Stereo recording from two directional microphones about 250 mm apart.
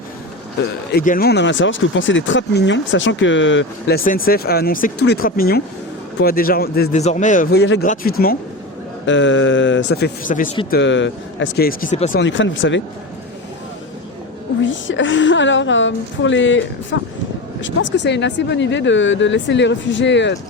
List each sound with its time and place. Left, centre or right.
0.9 s speech: left
9.0 s speech: left
10.7 s speech: left
12.1 s speech: left
14.6 s speech: left